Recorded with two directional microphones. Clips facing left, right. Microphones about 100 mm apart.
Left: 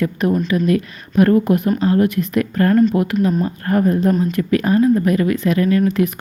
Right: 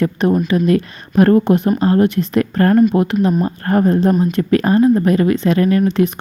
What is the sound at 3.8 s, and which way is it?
Speech, 30° right (ahead or behind).